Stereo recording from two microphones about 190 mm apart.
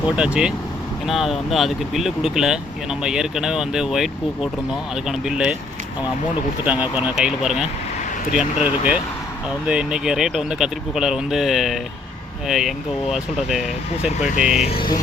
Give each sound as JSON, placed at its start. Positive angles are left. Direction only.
{"t": 0.2, "sound": "speech", "side_deg": -5}
{"t": 6.7, "sound": "speech", "side_deg": -10}
{"t": 14.2, "sound": "speech", "side_deg": 40}